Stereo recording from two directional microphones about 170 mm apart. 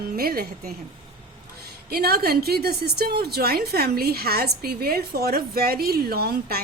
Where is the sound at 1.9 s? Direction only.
65° right (ahead or behind).